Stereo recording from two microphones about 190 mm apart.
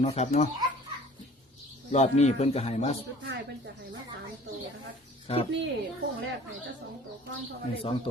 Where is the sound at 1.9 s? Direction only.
35° left (ahead or behind).